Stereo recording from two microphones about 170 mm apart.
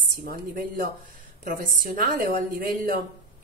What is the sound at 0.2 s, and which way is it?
A woman's voice, 60° right (ahead or behind).